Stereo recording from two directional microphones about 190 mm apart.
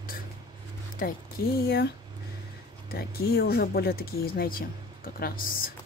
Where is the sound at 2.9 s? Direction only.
55° left (ahead or behind).